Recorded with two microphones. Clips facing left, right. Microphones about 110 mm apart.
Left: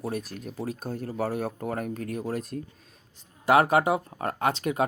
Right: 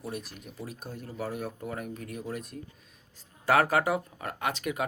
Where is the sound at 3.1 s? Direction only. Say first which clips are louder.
Left 4 dB; 20° left (ahead or behind).